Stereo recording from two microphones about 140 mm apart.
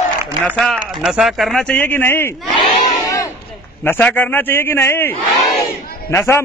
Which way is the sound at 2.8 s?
25° left (ahead or behind).